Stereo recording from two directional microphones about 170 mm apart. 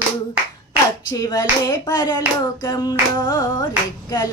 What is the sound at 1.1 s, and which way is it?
Hands, 20° left (ahead or behind).